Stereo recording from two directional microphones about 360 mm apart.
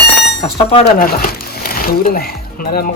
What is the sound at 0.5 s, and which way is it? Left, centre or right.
Speech, centre.